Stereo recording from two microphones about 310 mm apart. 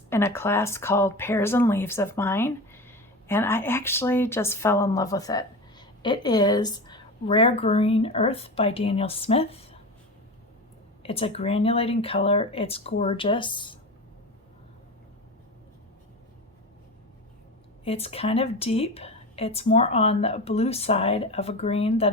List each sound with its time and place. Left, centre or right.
0.1 s speech: centre
11.0 s speech: centre
17.8 s a woman's voice: centre